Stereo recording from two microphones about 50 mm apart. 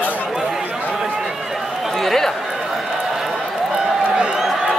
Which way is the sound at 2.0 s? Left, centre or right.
Centre.